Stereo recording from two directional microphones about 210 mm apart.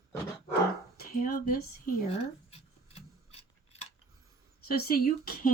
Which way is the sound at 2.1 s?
30° left (ahead or behind).